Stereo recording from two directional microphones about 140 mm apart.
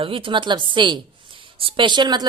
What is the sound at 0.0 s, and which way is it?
Speech, 40° right (ahead or behind).